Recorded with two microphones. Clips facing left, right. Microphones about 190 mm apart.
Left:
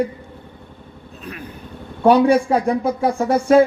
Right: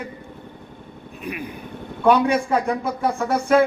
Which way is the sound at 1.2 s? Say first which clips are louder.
Right 3 dB; 10° right (ahead or behind).